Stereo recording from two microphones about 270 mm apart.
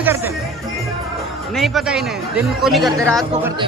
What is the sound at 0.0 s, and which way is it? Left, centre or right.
Speech, centre.